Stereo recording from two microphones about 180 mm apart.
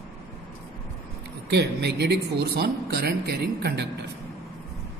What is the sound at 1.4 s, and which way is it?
Speech, 65° right (ahead or behind).